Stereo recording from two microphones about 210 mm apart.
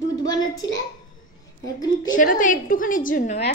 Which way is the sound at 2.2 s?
40° left (ahead or behind).